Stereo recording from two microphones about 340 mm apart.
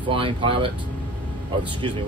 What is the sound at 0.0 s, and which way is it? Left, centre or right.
Speech, centre.